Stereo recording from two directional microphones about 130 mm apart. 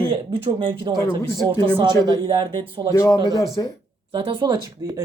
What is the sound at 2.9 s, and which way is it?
Speech, 25° left (ahead or behind).